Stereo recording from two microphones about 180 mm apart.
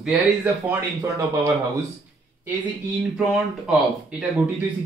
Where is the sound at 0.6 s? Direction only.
15° right (ahead or behind).